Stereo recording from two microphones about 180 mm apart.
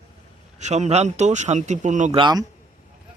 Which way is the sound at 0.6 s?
40° right (ahead or behind).